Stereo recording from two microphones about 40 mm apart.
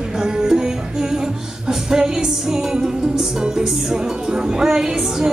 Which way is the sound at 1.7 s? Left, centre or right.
Centre.